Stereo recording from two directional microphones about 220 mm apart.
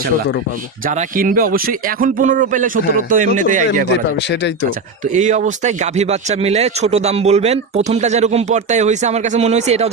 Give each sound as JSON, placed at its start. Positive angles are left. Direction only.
{"t": 0.9, "sound": "speech", "side_deg": -40}
{"t": 3.8, "sound": "speech", "side_deg": 50}
{"t": 5.1, "sound": "speech", "side_deg": -35}